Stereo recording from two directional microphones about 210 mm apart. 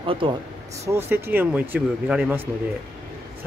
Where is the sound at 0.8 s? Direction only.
10° right (ahead or behind).